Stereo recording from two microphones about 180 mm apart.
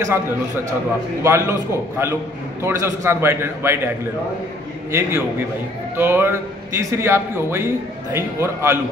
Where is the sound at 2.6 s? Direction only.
15° right (ahead or behind).